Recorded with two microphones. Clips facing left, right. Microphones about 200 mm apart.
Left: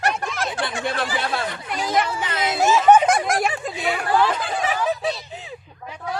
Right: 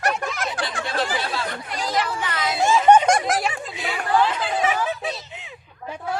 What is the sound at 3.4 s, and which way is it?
Snicker, 50° left (ahead or behind).